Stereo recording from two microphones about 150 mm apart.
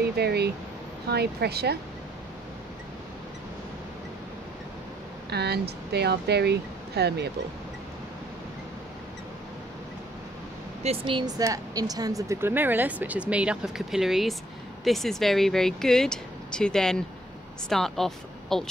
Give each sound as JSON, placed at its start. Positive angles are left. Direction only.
{"t": 0.0, "sound": "a sound", "side_deg": -90}
{"t": 1.1, "sound": "speech", "side_deg": -90}
{"t": 5.3, "sound": "speech", "side_deg": -90}
{"t": 10.8, "sound": "a woman's voice", "side_deg": -40}